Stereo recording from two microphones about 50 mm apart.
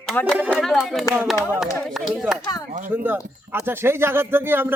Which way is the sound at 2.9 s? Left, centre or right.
Right.